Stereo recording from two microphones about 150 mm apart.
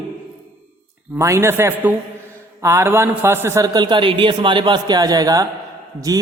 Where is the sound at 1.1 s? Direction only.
20° right (ahead or behind).